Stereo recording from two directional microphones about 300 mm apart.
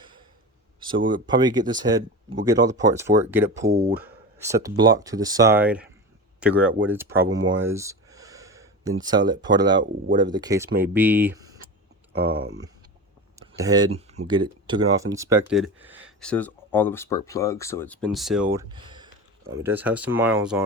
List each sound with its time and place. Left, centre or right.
0.8 s speech: centre
7.6 s a sound: centre
9.0 s speech: centre
12.1 s speech: right
13.4 s speech: centre
18.7 s speech: centre